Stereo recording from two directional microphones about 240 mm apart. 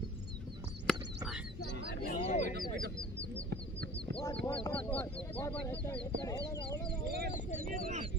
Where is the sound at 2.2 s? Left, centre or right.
Left.